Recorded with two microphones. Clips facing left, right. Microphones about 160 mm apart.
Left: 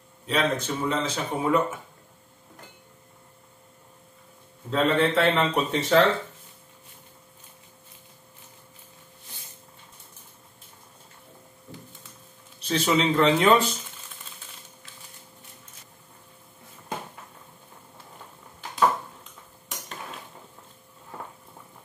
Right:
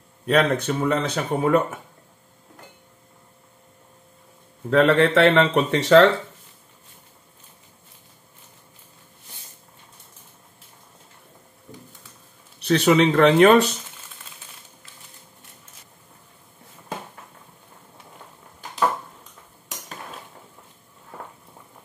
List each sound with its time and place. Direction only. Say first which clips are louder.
0.3 s speech: right 6 dB; 65° right (ahead or behind)
4.6 s a man's voice: right 6 dB; 75° right (ahead or behind)
12.5 s a man's voice: right 7 dB; 70° right (ahead or behind)